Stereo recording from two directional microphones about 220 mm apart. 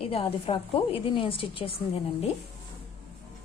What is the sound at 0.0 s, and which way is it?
A woman's voice, 25° left (ahead or behind).